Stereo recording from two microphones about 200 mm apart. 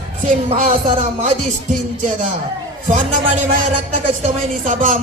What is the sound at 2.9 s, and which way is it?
Speech, 40° right (ahead or behind).